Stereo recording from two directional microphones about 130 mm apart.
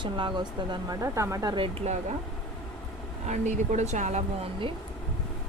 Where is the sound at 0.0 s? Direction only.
40° right (ahead or behind).